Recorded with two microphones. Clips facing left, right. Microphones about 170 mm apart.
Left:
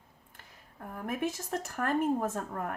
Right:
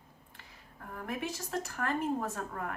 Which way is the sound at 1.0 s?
50° left (ahead or behind).